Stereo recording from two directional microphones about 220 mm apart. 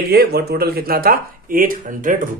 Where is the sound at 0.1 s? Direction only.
45° right (ahead or behind).